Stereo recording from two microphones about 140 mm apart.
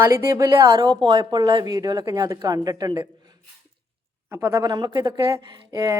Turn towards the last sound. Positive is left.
turn(degrees=-25)  # may be behind; listen again after turning